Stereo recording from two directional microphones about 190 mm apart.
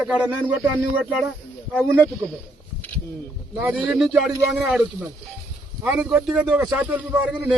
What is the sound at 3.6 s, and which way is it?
Speech, 10° right (ahead or behind).